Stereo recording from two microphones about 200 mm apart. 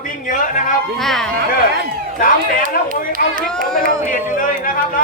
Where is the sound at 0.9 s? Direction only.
Centre (ahead or behind).